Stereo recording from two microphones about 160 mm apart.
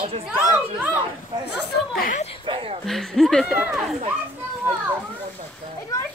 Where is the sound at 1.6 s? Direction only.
80° left.